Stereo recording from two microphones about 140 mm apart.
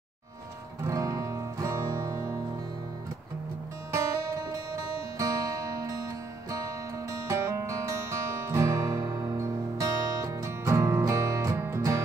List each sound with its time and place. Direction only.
0.8 s music: 25° right (ahead or behind)
3.9 s music: 25° right (ahead or behind)